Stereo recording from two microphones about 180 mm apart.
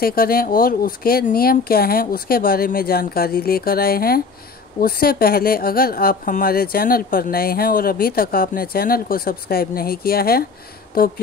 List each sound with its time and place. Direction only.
0.0 s speech: 55° left (ahead or behind)